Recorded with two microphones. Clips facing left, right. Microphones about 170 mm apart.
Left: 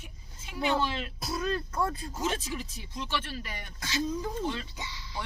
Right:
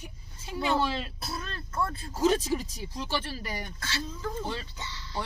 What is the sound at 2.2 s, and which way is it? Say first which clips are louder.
Speech: right 9 dB; 35° right (ahead or behind).